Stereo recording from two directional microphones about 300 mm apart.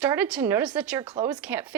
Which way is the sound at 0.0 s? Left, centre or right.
Centre.